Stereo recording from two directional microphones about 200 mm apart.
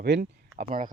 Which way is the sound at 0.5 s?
45° right (ahead or behind).